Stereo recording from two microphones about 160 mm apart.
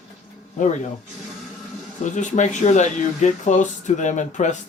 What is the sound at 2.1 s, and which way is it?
Speech, 50° left (ahead or behind).